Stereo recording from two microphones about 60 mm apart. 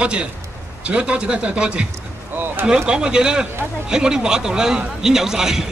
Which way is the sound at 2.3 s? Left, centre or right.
Right.